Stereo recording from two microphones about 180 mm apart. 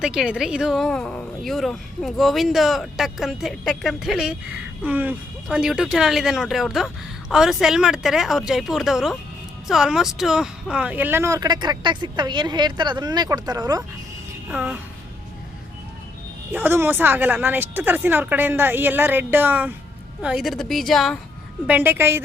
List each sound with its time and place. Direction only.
0.0 s speech: 5° right (ahead or behind); by 13.8 s 20° right (ahead or behind)
14.5 s a woman's voice: 10° right (ahead or behind)
16.5 s a woman's voice: 10° right (ahead or behind)
21.7 s a woman's voice: 10° right (ahead or behind)